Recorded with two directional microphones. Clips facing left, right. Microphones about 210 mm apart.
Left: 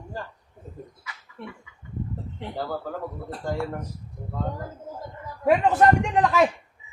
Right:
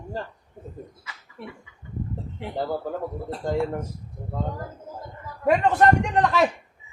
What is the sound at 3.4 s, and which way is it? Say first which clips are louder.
Speech: right 4 dB; 20° right (ahead or behind).